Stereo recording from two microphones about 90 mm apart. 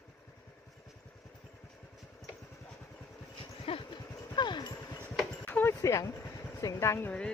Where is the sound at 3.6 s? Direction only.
80° left.